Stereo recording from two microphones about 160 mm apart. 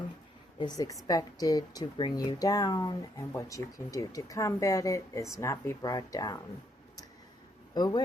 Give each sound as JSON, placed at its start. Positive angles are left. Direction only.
{"t": 1.0, "sound": "speech", "side_deg": 25}
{"t": 7.7, "sound": "speech", "side_deg": 25}